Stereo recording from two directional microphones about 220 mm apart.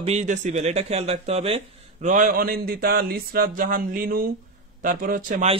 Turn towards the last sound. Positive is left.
turn(degrees=-40)  # may be behind; listen again after turning